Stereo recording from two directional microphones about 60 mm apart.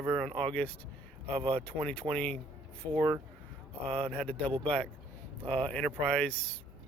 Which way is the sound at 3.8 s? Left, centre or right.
Centre.